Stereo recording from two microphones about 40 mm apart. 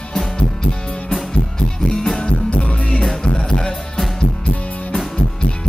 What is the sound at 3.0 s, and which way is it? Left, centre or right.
Music, centre.